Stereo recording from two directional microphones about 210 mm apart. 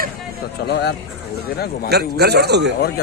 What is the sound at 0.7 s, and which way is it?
A man's voice, 50° left (ahead or behind).